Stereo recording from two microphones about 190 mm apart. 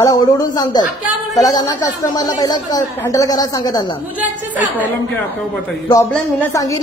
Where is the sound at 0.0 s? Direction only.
20° left (ahead or behind).